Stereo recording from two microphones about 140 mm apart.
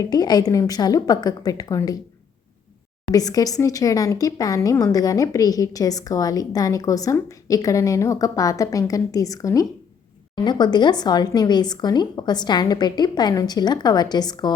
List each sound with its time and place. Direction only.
0.0 s speech: 30° left (ahead or behind)
3.1 s speech: 25° left (ahead or behind)